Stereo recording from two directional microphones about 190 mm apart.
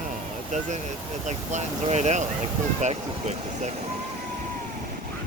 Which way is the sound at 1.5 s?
35° right (ahead or behind).